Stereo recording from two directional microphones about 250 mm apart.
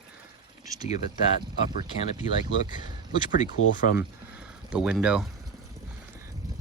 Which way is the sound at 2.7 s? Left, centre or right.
Centre.